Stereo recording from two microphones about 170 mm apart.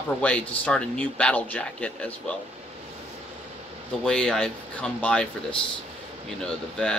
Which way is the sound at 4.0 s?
5° left (ahead or behind).